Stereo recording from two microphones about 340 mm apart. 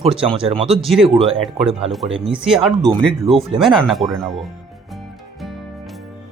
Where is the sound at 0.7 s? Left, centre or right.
Centre.